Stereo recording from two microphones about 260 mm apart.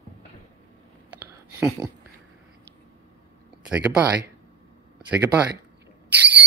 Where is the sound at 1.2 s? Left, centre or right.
Centre.